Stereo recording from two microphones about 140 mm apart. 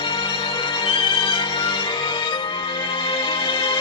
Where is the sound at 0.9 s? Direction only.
35° left (ahead or behind).